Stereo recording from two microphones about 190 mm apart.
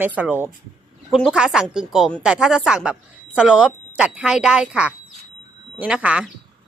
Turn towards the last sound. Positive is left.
turn(degrees=-5)  # may be behind; listen again after turning